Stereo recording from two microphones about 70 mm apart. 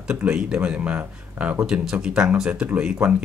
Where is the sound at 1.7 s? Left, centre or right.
Centre.